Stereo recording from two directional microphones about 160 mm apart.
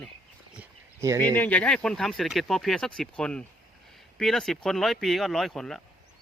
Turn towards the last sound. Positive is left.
turn(degrees=0)  # may be behind; listen again after turning